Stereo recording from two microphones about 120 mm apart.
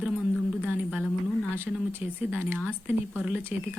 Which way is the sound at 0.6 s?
10° right (ahead or behind).